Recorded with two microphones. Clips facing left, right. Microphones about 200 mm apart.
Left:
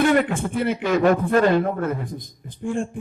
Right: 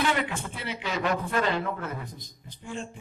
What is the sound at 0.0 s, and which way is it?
A man's voice, 50° left (ahead or behind).